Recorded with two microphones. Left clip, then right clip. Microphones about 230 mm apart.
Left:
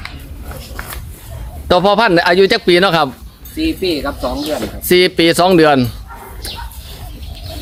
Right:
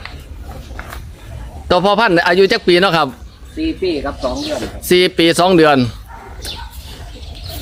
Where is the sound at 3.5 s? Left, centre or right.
Left.